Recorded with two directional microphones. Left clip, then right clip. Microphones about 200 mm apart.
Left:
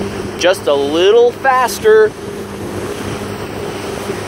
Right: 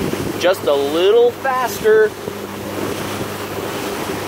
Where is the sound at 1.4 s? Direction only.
20° left (ahead or behind).